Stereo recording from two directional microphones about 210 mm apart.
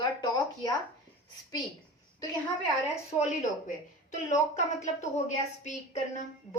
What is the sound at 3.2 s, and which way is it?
Speech, 35° left (ahead or behind).